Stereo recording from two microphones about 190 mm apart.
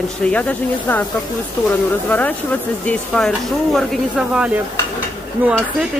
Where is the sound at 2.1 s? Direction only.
10° left (ahead or behind); by 5.5 s 10° right (ahead or behind).